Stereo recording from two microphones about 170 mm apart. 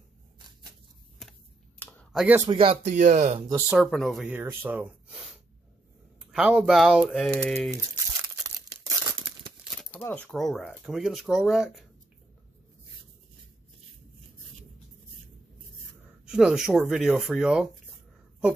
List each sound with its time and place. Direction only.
1.8 s a sound: 10° left (ahead or behind)
2.1 s speech: 10° right (ahead or behind)
2.4 s speech: 30° right (ahead or behind)
3.7 s speech: centre (ahead or behind)
4.4 s speech: 10° right (ahead or behind)
6.3 s speech: 5° right (ahead or behind)
8.2 s tearing: 20° right (ahead or behind)
10.0 s speech: 5° left (ahead or behind)
16.3 s speech: 5° right (ahead or behind)